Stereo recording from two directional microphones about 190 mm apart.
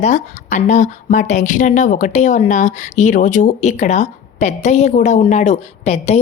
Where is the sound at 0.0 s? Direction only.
40° left (ahead or behind).